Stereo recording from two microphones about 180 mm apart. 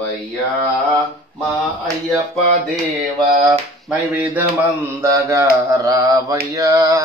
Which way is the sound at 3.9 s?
10° right (ahead or behind).